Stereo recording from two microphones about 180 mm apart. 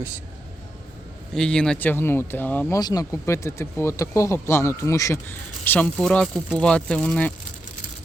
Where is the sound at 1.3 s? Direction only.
5° left (ahead or behind).